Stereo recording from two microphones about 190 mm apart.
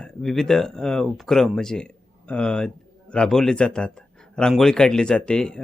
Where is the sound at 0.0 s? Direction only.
5° left (ahead or behind).